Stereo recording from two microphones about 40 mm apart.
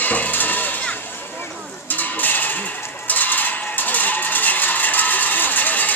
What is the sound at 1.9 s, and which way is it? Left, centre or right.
Livestock, left.